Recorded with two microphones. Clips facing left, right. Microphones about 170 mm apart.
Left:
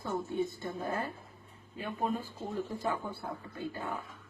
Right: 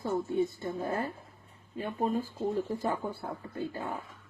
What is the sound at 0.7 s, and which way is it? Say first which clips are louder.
Speech: right 4 dB; 25° right (ahead or behind).